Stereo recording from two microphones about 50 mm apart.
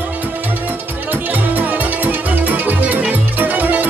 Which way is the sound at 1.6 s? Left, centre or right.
Right.